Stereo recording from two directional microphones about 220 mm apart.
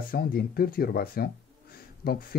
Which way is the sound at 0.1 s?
45° left (ahead or behind).